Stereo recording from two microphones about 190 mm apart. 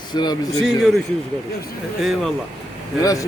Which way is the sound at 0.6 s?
Centre (ahead or behind).